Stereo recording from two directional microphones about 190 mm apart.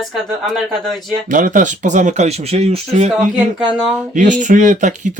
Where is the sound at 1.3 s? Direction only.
45° right (ahead or behind).